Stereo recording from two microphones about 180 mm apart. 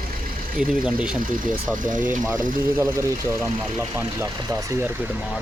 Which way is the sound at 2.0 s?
15° right (ahead or behind).